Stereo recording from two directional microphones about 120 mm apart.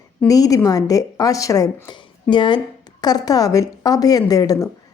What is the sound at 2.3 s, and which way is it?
A woman's voice, 40° left (ahead or behind).